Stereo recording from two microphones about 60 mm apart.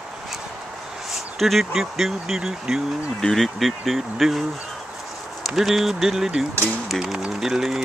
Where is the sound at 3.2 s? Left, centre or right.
Centre.